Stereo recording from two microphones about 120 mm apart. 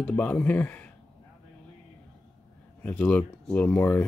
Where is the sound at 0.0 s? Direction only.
15° left (ahead or behind).